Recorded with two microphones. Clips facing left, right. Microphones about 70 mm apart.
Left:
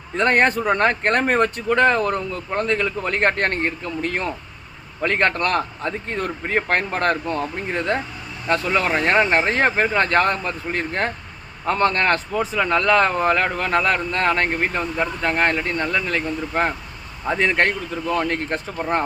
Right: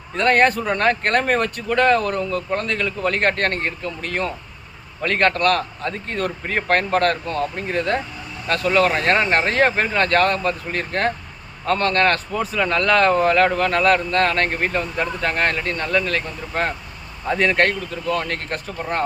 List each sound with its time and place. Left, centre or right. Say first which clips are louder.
0.2 s speech: right 1 dB; centre